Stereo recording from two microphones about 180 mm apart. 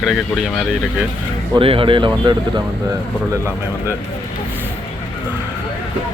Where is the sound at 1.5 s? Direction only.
30° right (ahead or behind).